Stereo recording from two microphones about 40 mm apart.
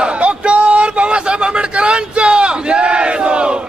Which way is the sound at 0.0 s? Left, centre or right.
Right.